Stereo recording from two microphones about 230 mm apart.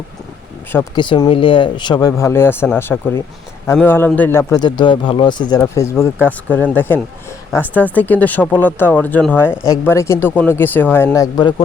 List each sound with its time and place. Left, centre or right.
0.9 s speech: centre